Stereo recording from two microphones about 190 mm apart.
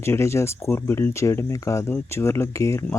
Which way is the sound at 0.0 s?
15° left (ahead or behind).